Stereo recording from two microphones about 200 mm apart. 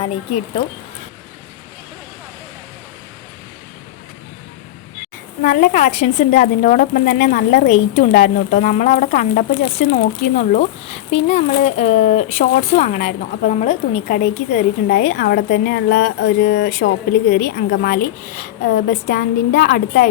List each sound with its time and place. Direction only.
5.4 s speech: 40° left (ahead or behind)
7.7 s speech: 35° left (ahead or behind)
10.3 s speech: 35° left (ahead or behind)
15.9 s speech: 65° left (ahead or behind); by 20.1 s 45° left (ahead or behind)